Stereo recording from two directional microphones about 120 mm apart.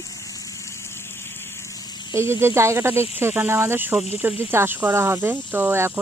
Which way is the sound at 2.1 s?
20° right (ahead or behind).